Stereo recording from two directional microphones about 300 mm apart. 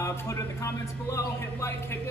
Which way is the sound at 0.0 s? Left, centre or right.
Centre.